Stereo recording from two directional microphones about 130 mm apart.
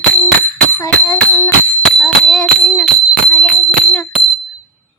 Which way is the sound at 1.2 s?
15° left (ahead or behind).